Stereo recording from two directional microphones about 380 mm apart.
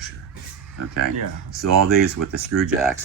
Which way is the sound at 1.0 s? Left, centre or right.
Right.